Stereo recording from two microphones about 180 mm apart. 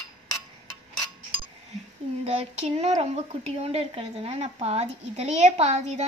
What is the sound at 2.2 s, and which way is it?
A woman's voice, 35° right (ahead or behind).